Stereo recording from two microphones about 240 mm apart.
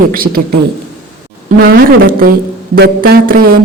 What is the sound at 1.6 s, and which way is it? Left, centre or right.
Speech, right.